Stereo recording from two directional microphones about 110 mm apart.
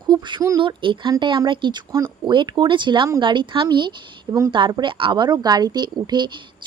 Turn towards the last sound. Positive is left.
turn(degrees=-45)  # may be behind; listen again after turning